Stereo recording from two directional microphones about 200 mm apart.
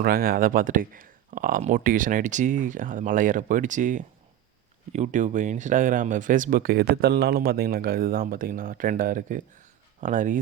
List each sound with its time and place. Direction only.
0.0 s speech: 45° right (ahead or behind)